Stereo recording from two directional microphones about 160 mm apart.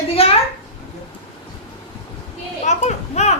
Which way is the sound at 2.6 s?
45° left (ahead or behind).